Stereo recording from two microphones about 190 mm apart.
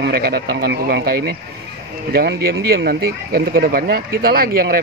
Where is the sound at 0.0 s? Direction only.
55° right (ahead or behind).